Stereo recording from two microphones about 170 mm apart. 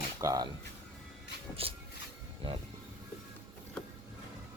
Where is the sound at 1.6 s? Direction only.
35° right (ahead or behind).